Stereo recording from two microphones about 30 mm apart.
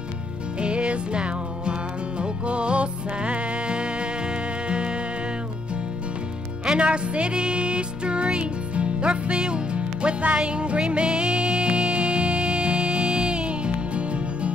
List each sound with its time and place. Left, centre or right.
0.6 s music: right
6.8 s music: right